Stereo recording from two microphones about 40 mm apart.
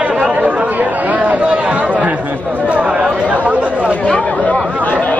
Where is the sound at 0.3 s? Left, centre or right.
Right.